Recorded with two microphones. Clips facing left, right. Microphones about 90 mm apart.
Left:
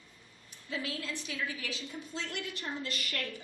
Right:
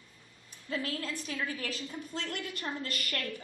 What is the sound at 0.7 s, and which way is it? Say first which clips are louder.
A woman's voice: right 2 dB; 45° right (ahead or behind).